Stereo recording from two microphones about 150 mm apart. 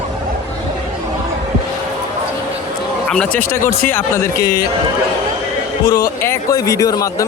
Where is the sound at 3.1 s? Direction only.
5° left (ahead or behind).